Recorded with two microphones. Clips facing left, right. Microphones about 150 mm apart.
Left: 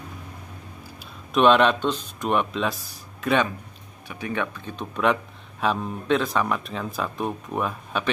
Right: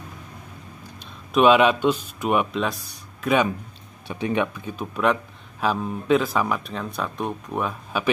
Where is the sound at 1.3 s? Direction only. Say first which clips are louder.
Right 1 dB; 5° right (ahead or behind).